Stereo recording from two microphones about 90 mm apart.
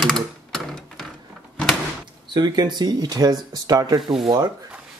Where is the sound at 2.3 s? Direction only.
50° right (ahead or behind).